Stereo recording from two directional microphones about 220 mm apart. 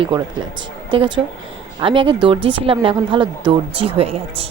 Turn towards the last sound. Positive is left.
turn(degrees=-25)  # may be behind; listen again after turning